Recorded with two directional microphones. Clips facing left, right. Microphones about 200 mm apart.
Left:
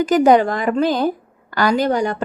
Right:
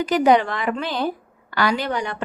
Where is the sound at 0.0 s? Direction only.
45° left (ahead or behind).